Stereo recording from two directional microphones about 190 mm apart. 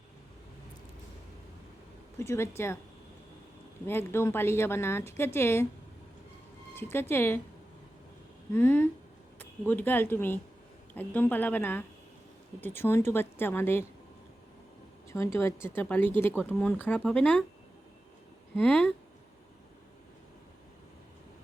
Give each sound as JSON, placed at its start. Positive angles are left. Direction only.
{"t": 2.1, "sound": "speech", "side_deg": 15}
{"t": 3.8, "sound": "speech", "side_deg": 10}
{"t": 6.7, "sound": "speech", "side_deg": 10}
{"t": 8.5, "sound": "speech", "side_deg": 10}
{"t": 15.1, "sound": "speech", "side_deg": 15}
{"t": 18.5, "sound": "speech", "side_deg": 5}